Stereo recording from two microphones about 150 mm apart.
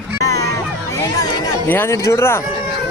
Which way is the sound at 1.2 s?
15° left (ahead or behind).